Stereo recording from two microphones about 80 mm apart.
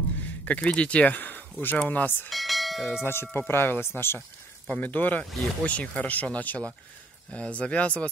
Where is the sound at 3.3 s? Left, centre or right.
Left.